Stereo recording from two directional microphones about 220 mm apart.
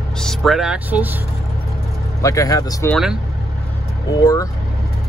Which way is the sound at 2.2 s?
15° left (ahead or behind).